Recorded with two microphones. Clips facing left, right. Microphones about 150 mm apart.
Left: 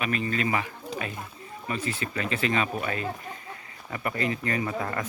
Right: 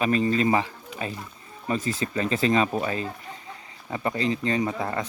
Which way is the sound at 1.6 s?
35° right (ahead or behind).